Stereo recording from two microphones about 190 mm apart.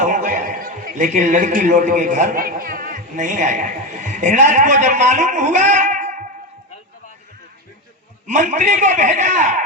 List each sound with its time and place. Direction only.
0.0 s a man's voice: 40° right (ahead or behind)
8.3 s a man's voice: 40° right (ahead or behind)